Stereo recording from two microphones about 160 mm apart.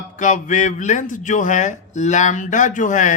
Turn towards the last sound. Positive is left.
turn(degrees=50)  # may be behind; listen again after turning